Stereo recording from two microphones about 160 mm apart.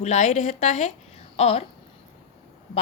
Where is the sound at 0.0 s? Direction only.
45° left (ahead or behind).